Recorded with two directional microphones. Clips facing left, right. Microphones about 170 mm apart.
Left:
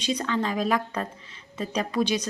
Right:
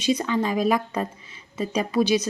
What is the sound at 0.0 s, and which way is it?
A woman's voice, 10° right (ahead or behind).